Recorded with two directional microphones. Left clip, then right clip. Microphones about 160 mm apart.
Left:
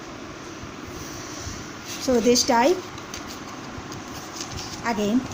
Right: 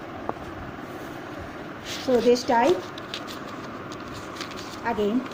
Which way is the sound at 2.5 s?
90° left.